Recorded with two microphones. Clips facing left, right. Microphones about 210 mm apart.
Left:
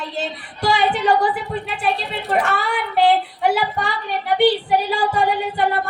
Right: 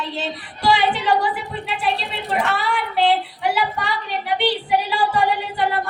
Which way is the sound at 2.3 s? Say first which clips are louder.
Left 2 dB; 45° left (ahead or behind).